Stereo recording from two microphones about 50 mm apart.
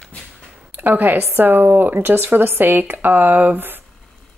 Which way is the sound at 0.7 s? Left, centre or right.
Right.